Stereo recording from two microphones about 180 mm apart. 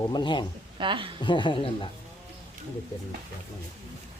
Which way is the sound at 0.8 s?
25° right (ahead or behind).